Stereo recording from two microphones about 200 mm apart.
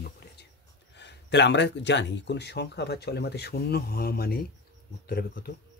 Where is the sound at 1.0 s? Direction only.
60° left (ahead or behind).